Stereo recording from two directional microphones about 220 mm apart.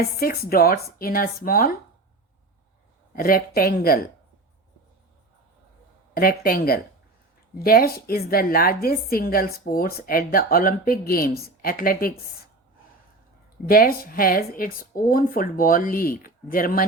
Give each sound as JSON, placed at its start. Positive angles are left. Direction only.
{"t": 0.2, "sound": "speech", "side_deg": 45}
{"t": 3.2, "sound": "a woman's voice", "side_deg": 40}
{"t": 6.1, "sound": "a woman's voice", "side_deg": 40}
{"t": 13.7, "sound": "a woman's voice", "side_deg": 40}